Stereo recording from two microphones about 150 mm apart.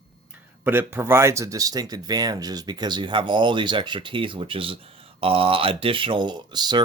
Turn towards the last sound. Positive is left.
turn(degrees=-30)  # may be behind; listen again after turning